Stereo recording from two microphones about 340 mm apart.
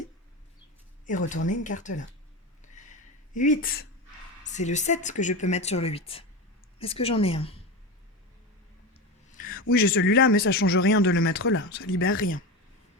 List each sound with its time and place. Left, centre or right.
1.3 s a woman's voice: left
3.3 s a woman's voice: left
8.9 s speech: left